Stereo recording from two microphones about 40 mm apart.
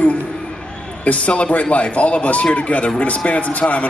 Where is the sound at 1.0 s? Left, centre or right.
Left.